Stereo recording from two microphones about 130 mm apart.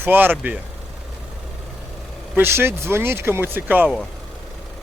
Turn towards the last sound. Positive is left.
turn(degrees=-15)  # may be behind; listen again after turning